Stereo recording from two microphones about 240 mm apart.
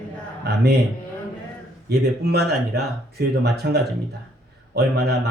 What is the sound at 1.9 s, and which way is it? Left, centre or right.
A man's voice, right.